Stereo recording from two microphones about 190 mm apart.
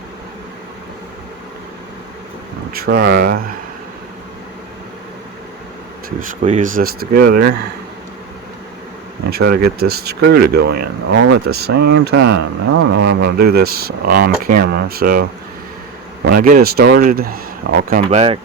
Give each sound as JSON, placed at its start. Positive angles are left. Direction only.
{"t": 2.8, "sound": "speech", "side_deg": -55}
{"t": 6.1, "sound": "speech", "side_deg": -40}
{"t": 9.3, "sound": "speech", "side_deg": -55}